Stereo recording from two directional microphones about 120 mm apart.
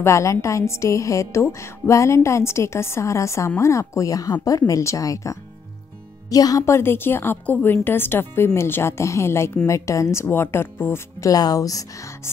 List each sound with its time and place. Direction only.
0.0 s a woman's voice: 25° left (ahead or behind)
11.3 s a woman's voice: 30° left (ahead or behind)